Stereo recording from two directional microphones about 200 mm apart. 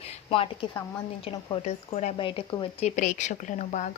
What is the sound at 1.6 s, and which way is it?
Speech, 35° left (ahead or behind).